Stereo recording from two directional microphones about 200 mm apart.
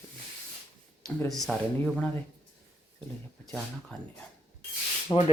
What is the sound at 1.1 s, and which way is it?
Speech, 10° left (ahead or behind).